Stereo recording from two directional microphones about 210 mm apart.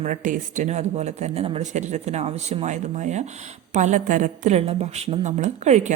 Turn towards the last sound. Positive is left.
turn(degrees=-35)  # may be behind; listen again after turning